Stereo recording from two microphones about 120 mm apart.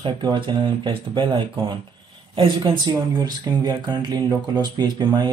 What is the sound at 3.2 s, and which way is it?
Speech, 35° right (ahead or behind).